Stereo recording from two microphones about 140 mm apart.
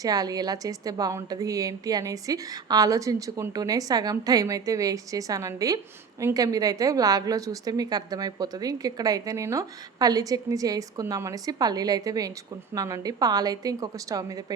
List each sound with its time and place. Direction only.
0.0 s a woman's voice: 25° right (ahead or behind)